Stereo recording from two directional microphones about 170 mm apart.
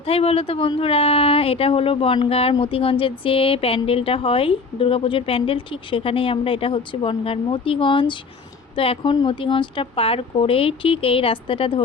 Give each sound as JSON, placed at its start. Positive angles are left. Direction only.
{"t": 0.0, "sound": "speech", "side_deg": 35}